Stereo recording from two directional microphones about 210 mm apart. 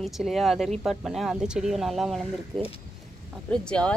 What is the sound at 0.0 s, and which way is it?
Speech, centre (ahead or behind).